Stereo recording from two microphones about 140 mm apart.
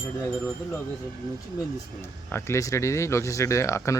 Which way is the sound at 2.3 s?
20° left (ahead or behind).